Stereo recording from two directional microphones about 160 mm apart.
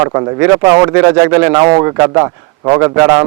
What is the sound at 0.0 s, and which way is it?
A man's voice, 20° right (ahead or behind).